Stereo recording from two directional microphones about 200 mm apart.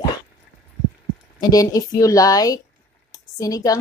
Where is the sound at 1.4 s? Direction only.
20° left (ahead or behind).